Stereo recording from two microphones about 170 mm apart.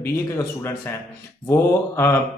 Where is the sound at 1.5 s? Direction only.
15° left (ahead or behind).